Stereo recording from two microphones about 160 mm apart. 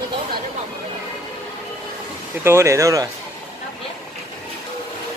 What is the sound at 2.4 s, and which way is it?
Speech, 15° right (ahead or behind).